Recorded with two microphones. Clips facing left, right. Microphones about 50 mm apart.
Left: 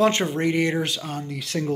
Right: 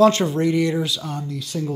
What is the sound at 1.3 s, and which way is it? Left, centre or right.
Speech, left.